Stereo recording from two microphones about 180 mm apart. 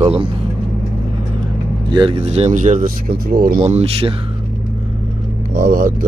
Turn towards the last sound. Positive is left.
turn(degrees=-50)  # may be behind; listen again after turning